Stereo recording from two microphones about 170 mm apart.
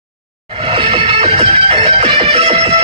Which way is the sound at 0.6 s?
30° right (ahead or behind).